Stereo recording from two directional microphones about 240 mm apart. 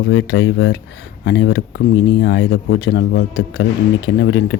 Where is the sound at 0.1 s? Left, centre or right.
Left.